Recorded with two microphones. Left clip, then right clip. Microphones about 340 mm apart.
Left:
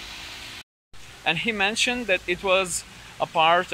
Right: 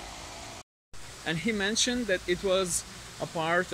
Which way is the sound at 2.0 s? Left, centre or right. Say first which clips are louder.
Left 5 dB; left.